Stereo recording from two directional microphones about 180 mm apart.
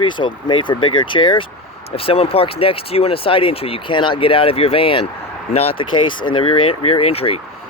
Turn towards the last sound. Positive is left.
turn(degrees=35)  # may be behind; listen again after turning